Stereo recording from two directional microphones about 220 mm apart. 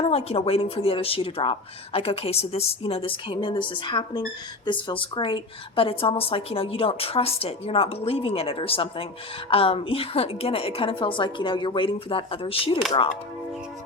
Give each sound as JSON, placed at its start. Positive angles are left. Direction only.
{"t": 0.0, "sound": "a woman's voice", "side_deg": 25}